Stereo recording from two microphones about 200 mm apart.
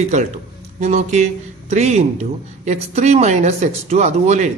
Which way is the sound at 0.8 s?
35° right (ahead or behind).